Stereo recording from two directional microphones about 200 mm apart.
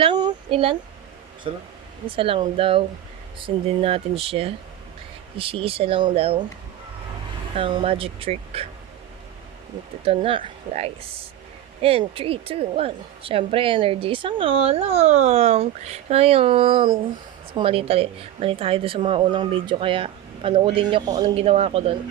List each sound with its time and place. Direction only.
0.0 s a sound: 20° right (ahead or behind)
1.5 s a woman's voice: 25° right (ahead or behind)
7.5 s a woman's voice: 25° right (ahead or behind)
10.0 s a woman's voice: 25° right (ahead or behind)